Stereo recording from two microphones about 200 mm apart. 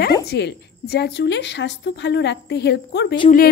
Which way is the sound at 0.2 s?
55° left (ahead or behind).